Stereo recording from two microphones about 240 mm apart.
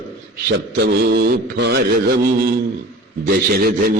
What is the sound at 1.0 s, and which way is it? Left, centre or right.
Mantra, right.